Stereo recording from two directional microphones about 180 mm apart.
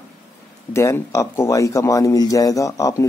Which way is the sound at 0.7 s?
15° left (ahead or behind).